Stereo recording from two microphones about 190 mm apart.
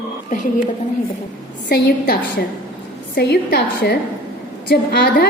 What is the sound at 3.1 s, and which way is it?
A woman's voice, 55° left (ahead or behind).